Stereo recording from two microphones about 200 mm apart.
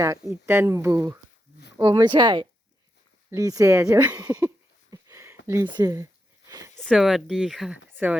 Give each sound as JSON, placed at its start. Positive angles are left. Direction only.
{"t": 0.0, "sound": "speech", "side_deg": -15}
{"t": 4.2, "sound": "a sound", "side_deg": -15}
{"t": 5.5, "sound": "speech", "side_deg": -15}
{"t": 6.7, "sound": "speech", "side_deg": 0}